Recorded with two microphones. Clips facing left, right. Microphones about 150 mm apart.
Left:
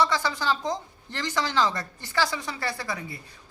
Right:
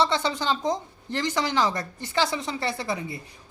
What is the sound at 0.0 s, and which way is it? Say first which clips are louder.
Speech: right 1 dB; 25° right (ahead or behind).